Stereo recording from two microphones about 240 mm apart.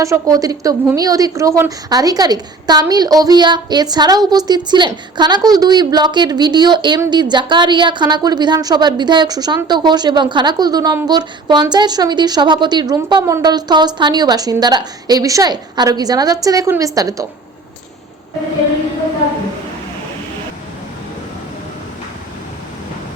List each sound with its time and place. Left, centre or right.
0.0 s a woman's voice: centre